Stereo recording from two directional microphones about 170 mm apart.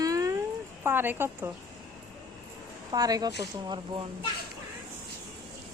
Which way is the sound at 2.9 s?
20° right (ahead or behind).